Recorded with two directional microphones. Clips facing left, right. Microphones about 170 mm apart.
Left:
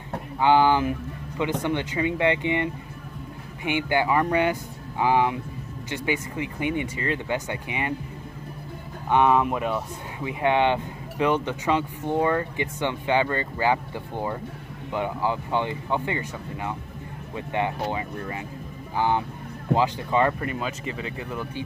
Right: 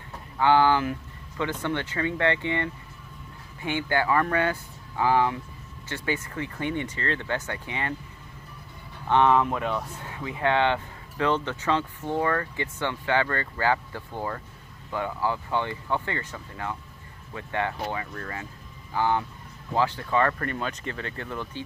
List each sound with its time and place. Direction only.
0.4 s speech: 15° left (ahead or behind)
9.1 s speech: 10° left (ahead or behind)